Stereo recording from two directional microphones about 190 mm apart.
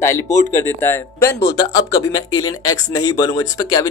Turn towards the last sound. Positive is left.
turn(degrees=20)  # may be behind; listen again after turning